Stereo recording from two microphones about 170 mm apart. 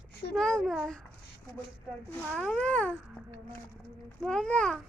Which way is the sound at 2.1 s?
5° left (ahead or behind).